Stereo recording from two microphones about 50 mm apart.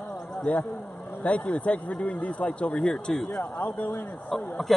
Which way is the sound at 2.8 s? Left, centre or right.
Centre.